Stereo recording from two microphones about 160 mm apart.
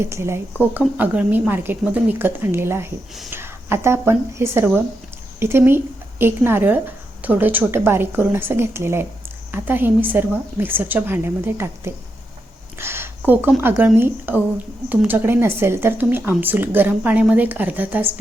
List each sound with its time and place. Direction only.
0.0 s speech: 15° right (ahead or behind)
12.8 s a sound: 15° right (ahead or behind)
13.6 s speech: 10° right (ahead or behind)